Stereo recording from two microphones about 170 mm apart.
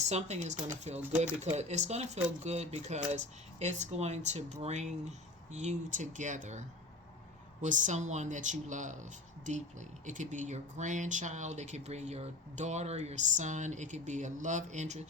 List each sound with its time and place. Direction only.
0.0 s speech: 40° right (ahead or behind)
10.1 s speech: 45° right (ahead or behind)